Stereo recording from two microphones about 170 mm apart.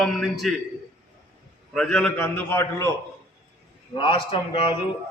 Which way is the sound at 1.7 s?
Centre (ahead or behind).